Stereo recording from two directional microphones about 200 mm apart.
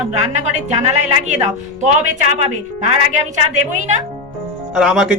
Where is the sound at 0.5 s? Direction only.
35° right (ahead or behind).